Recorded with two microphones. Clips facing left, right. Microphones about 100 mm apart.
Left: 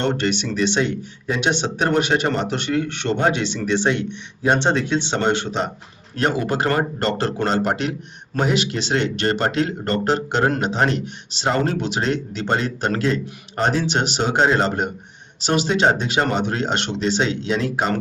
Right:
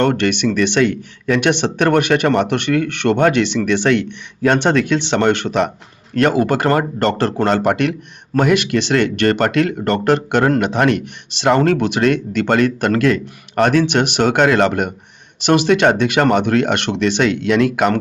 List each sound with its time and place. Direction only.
0.0 s speech: 65° right (ahead or behind)